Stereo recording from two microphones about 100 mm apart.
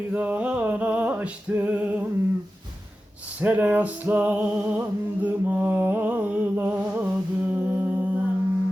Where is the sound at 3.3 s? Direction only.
15° right (ahead or behind).